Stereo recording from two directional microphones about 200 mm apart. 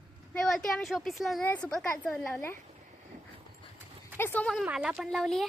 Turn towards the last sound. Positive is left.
turn(degrees=0)  # may be behind; listen again after turning